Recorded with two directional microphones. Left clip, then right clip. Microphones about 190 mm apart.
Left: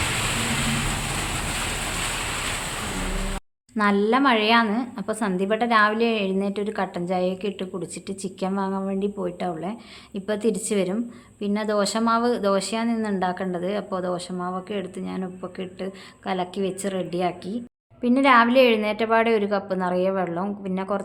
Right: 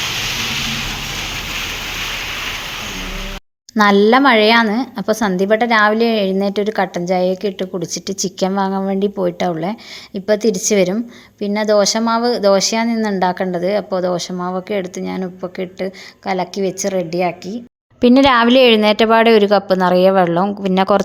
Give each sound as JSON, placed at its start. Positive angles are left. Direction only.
{"t": 3.8, "sound": "a woman's voice", "side_deg": -45}
{"t": 18.0, "sound": "a woman's voice", "side_deg": -45}